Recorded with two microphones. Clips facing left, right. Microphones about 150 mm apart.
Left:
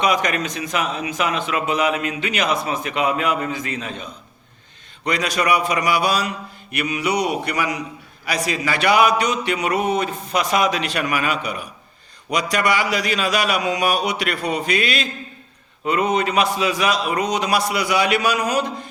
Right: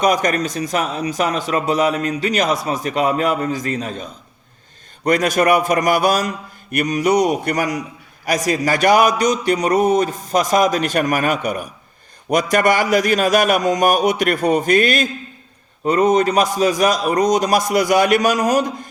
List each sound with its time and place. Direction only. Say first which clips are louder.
0.0 s a man's voice: right 3 dB; 45° right (ahead or behind)